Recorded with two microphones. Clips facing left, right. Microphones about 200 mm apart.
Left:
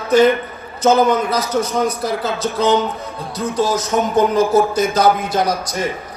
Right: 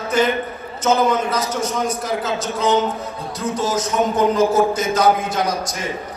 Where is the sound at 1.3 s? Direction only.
35° left (ahead or behind).